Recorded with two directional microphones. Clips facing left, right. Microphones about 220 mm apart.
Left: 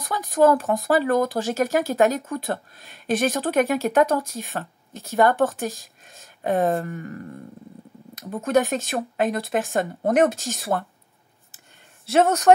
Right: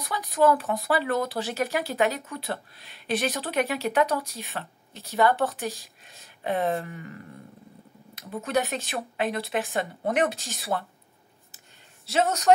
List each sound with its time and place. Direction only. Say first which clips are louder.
0.0 s speech: left 4 dB; 45° left (ahead or behind)
12.1 s speech: left 5 dB; 55° left (ahead or behind)